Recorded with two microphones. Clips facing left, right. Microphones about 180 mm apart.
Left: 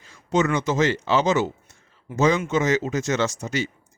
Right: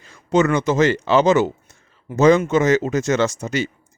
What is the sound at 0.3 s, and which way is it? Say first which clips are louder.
Speech: right 5 dB; 60° right (ahead or behind).